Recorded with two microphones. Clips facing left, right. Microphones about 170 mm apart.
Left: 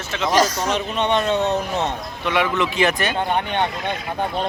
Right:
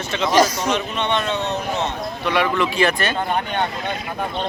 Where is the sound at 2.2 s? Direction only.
20° left (ahead or behind).